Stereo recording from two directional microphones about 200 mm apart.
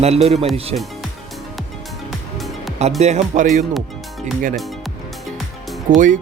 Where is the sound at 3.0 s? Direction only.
35° right (ahead or behind).